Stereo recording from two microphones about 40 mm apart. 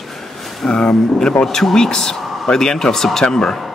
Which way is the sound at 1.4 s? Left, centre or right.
Centre.